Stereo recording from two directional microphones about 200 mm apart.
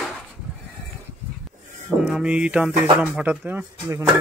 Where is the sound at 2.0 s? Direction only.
5° right (ahead or behind).